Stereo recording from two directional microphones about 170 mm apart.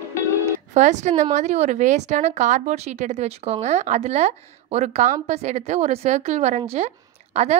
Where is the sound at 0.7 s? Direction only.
45° right (ahead or behind).